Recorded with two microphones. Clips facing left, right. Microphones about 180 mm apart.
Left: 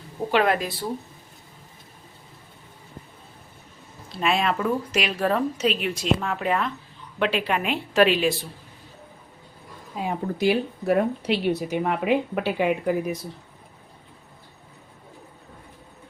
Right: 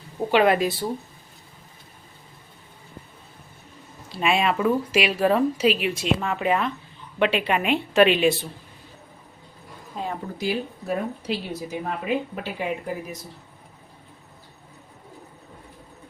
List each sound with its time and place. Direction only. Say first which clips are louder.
0.3 s speech: right 3 dB; centre (ahead or behind)
4.1 s speech: right 1 dB; 5° right (ahead or behind)
9.9 s speech: left 2 dB; 10° left (ahead or behind)
10.4 s a woman's voice: left 5 dB; 70° left (ahead or behind)